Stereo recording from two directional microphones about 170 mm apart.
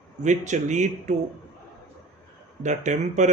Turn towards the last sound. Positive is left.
turn(degrees=-45)  # may be behind; listen again after turning